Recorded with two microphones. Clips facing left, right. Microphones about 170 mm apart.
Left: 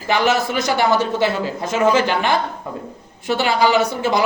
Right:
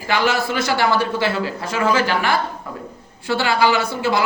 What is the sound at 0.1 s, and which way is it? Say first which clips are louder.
Speech: left 2 dB; 20° left (ahead or behind).